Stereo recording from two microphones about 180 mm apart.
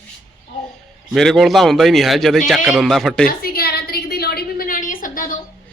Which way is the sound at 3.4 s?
55° left (ahead or behind).